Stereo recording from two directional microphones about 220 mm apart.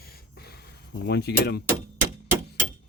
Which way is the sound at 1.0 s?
50° left (ahead or behind).